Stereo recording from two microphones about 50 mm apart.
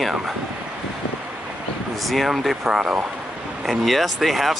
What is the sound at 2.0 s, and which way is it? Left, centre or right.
Speech, centre.